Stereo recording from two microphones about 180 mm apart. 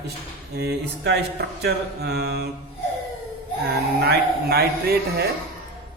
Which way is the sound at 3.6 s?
60° right (ahead or behind).